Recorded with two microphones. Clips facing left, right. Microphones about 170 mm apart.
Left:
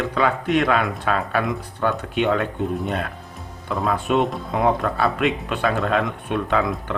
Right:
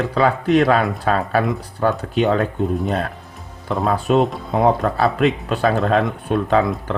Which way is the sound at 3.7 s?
40° right (ahead or behind).